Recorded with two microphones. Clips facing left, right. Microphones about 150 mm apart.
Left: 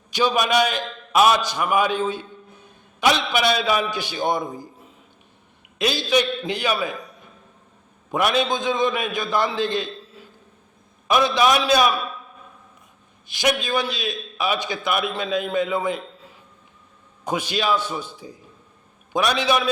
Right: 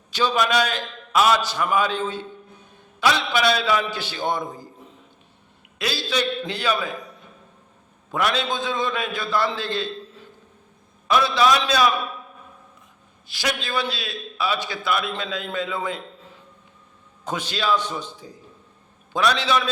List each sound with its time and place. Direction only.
0.1 s a man's voice: 15° left (ahead or behind)
5.8 s a man's voice: 20° left (ahead or behind)
8.1 s a man's voice: 15° left (ahead or behind)
11.1 s a man's voice: 15° left (ahead or behind)
13.2 s a man's voice: 20° left (ahead or behind)
17.2 s a man's voice: 10° left (ahead or behind)